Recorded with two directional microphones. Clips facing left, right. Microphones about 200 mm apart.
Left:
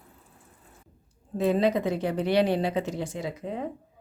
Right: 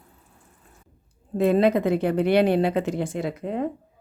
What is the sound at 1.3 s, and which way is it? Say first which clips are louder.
Speech: right 4 dB; 60° right (ahead or behind).